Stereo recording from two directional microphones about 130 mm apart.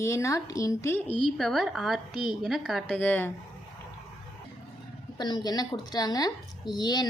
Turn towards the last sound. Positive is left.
turn(degrees=35)  # may be behind; listen again after turning